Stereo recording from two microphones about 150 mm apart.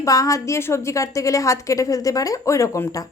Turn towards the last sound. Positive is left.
turn(degrees=20)  # may be behind; listen again after turning